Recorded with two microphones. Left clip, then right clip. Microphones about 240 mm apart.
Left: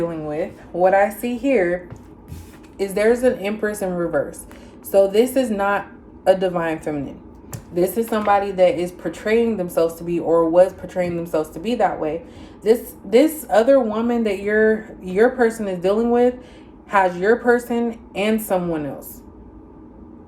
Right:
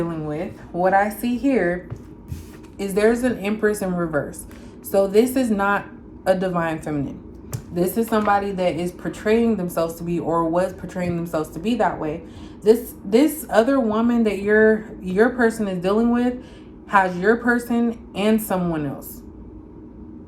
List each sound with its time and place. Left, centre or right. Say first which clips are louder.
0.8 s a woman's voice: left 3 dB; centre
2.7 s a woman's voice: left 1 dB; centre